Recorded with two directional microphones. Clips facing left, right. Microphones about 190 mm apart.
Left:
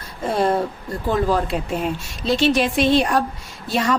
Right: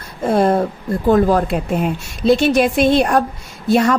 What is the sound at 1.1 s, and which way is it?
A woman's voice, 55° right (ahead or behind).